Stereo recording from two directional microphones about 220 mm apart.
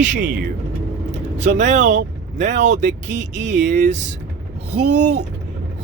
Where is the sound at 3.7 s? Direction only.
35° right (ahead or behind).